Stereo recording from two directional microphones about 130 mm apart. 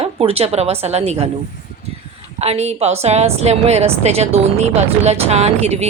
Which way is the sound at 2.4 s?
55° right (ahead or behind).